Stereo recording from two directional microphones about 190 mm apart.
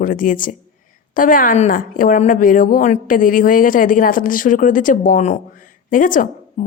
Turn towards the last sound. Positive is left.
turn(degrees=45)  # may be behind; listen again after turning